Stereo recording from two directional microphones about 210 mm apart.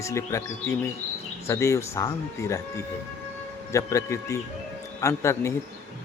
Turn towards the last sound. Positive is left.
turn(degrees=15)  # may be behind; listen again after turning